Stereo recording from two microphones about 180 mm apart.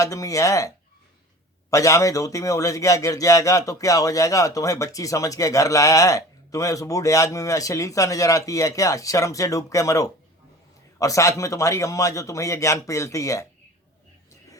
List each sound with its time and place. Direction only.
0.0 s a man's voice: 20° left (ahead or behind)
1.7 s a man's voice: 15° left (ahead or behind)